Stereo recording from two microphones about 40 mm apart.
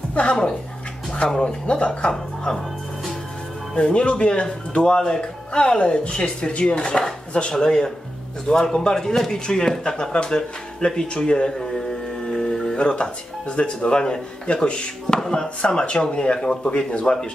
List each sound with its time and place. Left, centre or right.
0.1 s speech: left
3.7 s speech: left
12.3 s music: left
13.6 s speech: left